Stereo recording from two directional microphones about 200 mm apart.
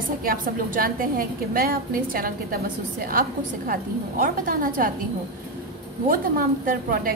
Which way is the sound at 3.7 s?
45° right (ahead or behind).